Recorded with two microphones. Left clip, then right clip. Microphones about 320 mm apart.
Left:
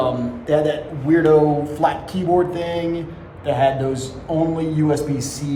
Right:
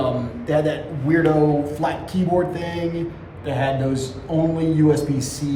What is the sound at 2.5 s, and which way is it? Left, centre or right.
Speech, centre.